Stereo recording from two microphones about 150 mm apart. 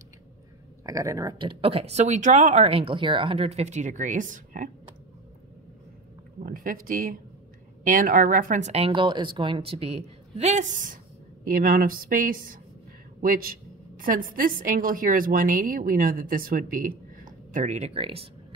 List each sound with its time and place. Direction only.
0.8 s speech: 20° right (ahead or behind)
1.4 s speech: 35° right (ahead or behind); by 4.6 s 60° right (ahead or behind)
6.4 s a woman's voice: 70° right (ahead or behind)
11.4 s a woman's voice: 75° right (ahead or behind); by 18.3 s 35° right (ahead or behind)